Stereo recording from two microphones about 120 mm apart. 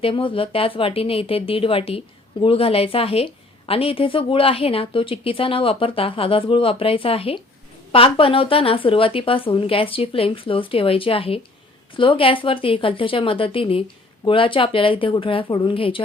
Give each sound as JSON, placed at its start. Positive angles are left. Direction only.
{"t": 0.0, "sound": "a woman's voice", "side_deg": 50}